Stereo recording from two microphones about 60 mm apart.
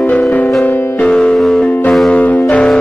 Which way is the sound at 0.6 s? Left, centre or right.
Left.